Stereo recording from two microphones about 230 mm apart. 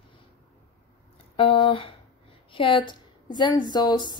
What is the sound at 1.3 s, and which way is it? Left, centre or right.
A woman's voice, left.